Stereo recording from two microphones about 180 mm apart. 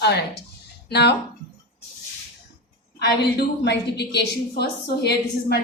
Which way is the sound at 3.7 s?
70° left (ahead or behind).